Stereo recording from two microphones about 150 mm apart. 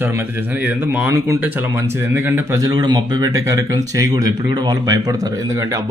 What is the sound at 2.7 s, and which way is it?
Speech, 30° right (ahead or behind).